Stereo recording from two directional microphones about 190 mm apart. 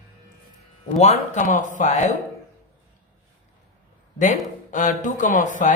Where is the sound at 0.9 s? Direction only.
35° left (ahead or behind).